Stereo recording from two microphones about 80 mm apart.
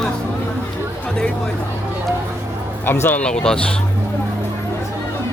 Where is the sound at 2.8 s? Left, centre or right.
Left.